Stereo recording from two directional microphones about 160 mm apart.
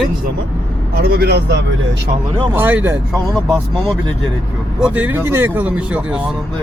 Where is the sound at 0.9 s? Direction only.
75° right (ahead or behind); by 1.6 s 90° right.